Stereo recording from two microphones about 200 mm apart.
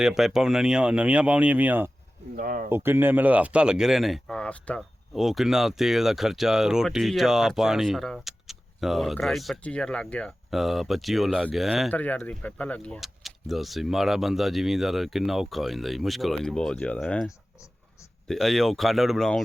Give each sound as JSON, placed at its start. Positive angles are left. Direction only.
{"t": 0.0, "sound": "speech", "side_deg": 0}
{"t": 2.3, "sound": "speech", "side_deg": -45}
{"t": 2.6, "sound": "speech", "side_deg": -10}